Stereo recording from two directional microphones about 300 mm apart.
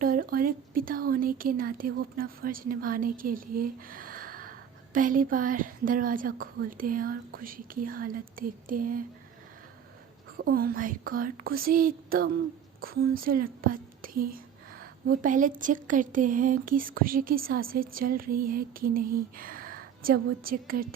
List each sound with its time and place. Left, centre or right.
0.0 s a woman's voice: right
10.3 s a woman's voice: right